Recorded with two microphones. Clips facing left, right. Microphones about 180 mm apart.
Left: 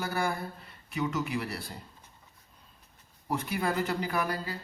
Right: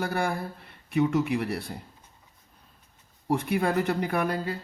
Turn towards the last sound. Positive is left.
turn(degrees=-60)  # may be behind; listen again after turning